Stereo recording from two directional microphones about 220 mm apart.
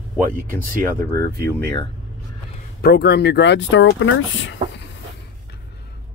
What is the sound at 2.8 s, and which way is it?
Speech, 50° left (ahead or behind).